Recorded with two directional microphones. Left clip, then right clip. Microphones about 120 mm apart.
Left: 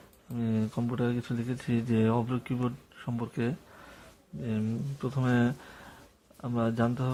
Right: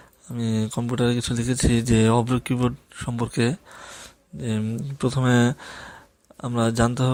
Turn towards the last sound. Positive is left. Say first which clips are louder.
# right 7 dB
turn(degrees=-40)  # may be behind; listen again after turning